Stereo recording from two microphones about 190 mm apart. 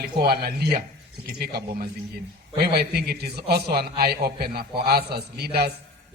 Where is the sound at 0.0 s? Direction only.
55° right (ahead or behind).